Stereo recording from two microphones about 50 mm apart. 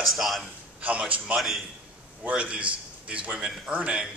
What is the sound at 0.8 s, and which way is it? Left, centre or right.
Speech, right.